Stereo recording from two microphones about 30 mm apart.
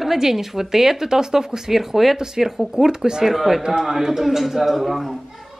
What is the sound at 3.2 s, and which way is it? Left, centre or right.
Speech, centre.